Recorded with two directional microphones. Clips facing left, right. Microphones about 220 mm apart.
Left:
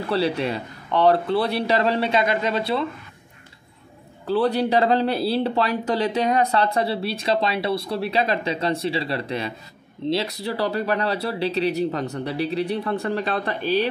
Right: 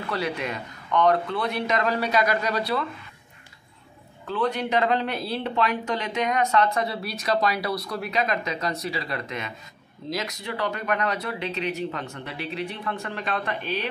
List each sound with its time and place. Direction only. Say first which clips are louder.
0.1 s speech: left 6 dB; 30° left (ahead or behind)
4.3 s speech: left 5 dB; 35° left (ahead or behind)